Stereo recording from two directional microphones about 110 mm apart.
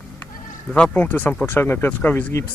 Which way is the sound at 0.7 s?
10° left (ahead or behind).